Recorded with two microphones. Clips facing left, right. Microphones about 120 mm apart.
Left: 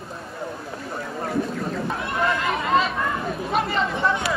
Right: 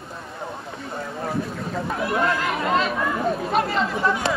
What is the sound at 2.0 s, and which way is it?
Chatter, centre (ahead or behind).